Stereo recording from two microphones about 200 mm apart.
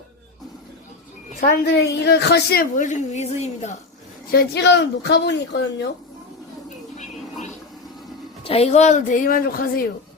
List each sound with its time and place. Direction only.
1.4 s a woman's voice: 50° left (ahead or behind); by 3.8 s 35° left (ahead or behind)
4.3 s speech: 55° left (ahead or behind)
8.4 s a woman's voice: 30° left (ahead or behind); by 9.8 s 45° left (ahead or behind)